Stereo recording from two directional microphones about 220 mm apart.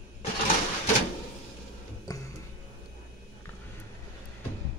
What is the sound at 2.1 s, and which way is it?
Music, 15° left (ahead or behind).